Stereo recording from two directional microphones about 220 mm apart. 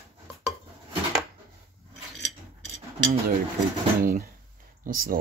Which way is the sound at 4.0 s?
40° right (ahead or behind).